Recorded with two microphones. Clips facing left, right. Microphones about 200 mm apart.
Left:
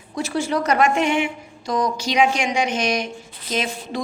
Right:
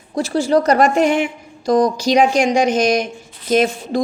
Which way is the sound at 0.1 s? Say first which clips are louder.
Right 7 dB; 35° right (ahead or behind).